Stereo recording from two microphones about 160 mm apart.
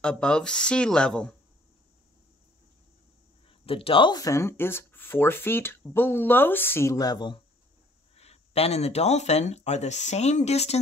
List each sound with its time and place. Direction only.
0.0 s speech: 5° left (ahead or behind)
3.4 s speech: 35° left (ahead or behind)
8.2 s speech: 40° left (ahead or behind)